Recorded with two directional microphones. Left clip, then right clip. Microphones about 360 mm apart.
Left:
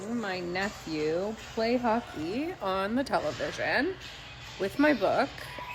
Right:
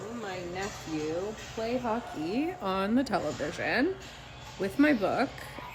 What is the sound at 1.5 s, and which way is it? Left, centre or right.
Speech, left.